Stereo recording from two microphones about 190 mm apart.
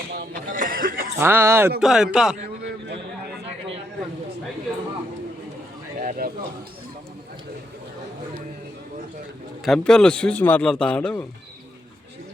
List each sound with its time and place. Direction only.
0.5 s chuckle: 45° right (ahead or behind)
1.2 s speech: 15° right (ahead or behind)
1.8 s a man's voice: centre (ahead or behind)
6.0 s a sound: 45° right (ahead or behind)
9.6 s a man's voice: 5° left (ahead or behind)